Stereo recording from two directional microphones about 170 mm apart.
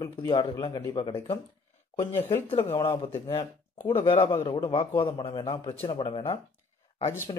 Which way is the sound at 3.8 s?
35° left (ahead or behind).